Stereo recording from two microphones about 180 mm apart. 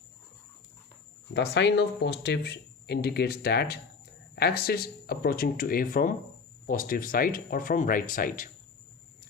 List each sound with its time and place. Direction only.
1.3 s speech: 80° left; by 8.4 s 50° left (ahead or behind)